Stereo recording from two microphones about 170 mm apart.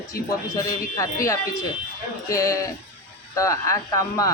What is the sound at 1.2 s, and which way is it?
Speech, 15° left (ahead or behind).